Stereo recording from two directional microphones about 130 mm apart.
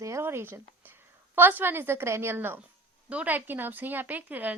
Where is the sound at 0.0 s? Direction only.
20° right (ahead or behind).